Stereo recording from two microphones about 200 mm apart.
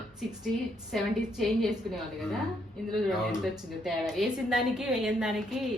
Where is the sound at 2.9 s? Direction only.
Centre (ahead or behind).